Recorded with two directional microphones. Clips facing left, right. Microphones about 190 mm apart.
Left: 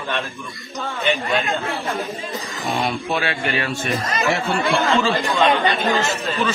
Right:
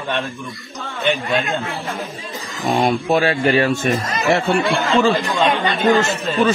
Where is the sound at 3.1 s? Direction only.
40° right (ahead or behind).